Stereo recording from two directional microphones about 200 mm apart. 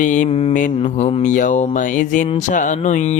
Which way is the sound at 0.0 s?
40° left (ahead or behind).